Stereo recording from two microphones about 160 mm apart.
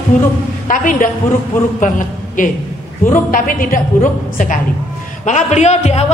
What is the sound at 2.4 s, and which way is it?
A man's voice, 55° left (ahead or behind).